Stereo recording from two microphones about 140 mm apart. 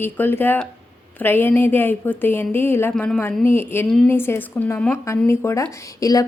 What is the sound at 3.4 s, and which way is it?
Speech, 15° left (ahead or behind).